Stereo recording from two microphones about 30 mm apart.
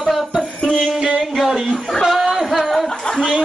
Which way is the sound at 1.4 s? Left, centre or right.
Right.